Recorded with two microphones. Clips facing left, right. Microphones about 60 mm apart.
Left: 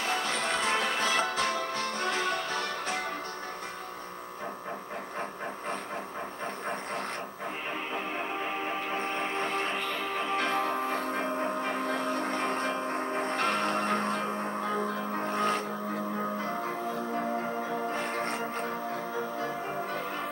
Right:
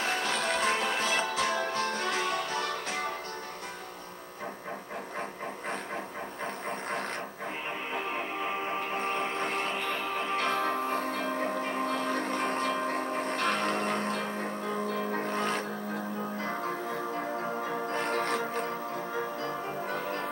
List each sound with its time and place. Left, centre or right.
0.0 s music: centre
0.6 s music: centre
0.8 s music: centre
7.9 s music: centre
9.2 s a sound: left
9.8 s music: centre
11.6 s vehicle: centre
11.9 s a sound: centre
12.2 s music: centre
17.8 s music: centre